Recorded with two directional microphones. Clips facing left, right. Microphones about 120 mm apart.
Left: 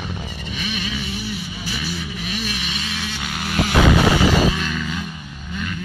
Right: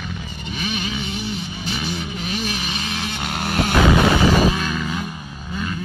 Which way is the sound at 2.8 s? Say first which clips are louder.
Right 2 dB; 40° right (ahead or behind).